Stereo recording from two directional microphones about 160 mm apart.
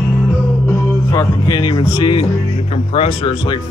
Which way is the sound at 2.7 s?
40° left (ahead or behind).